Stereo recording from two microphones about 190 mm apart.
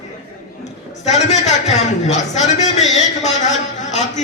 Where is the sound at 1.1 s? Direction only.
35° left (ahead or behind).